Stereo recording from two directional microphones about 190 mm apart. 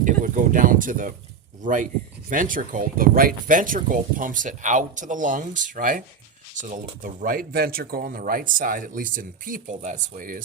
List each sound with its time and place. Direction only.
0.0 s speech: 45° right (ahead or behind)